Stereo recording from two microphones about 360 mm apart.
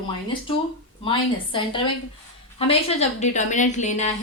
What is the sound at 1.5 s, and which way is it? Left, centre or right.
A woman's voice, centre.